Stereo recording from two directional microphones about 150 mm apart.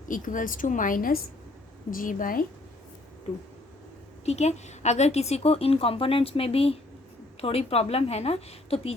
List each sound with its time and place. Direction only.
0.1 s a woman's voice: 60° left (ahead or behind)
4.3 s a woman's voice: 50° left (ahead or behind)